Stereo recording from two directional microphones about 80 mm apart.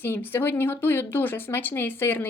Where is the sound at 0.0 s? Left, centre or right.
Left.